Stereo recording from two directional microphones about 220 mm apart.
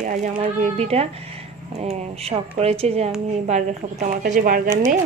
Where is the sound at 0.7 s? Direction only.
30° right (ahead or behind).